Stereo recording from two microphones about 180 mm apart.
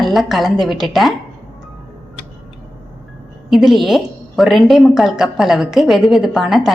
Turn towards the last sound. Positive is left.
turn(degrees=0)  # may be behind; listen again after turning